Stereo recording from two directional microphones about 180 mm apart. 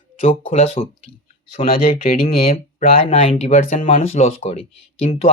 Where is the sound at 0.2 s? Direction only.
30° left (ahead or behind).